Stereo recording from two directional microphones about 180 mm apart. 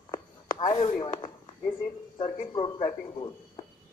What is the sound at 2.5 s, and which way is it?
Speech, 25° left (ahead or behind).